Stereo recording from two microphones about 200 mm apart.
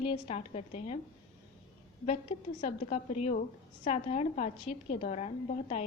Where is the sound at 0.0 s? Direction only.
30° left (ahead or behind).